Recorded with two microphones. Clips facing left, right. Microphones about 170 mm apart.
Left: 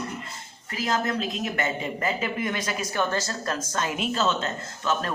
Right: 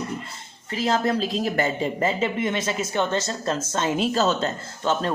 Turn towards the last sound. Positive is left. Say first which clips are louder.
# right 3 dB
turn(degrees=-30)  # may be behind; listen again after turning